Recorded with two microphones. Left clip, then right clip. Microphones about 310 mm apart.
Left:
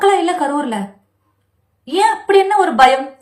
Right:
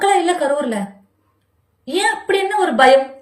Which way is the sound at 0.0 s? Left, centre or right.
Left.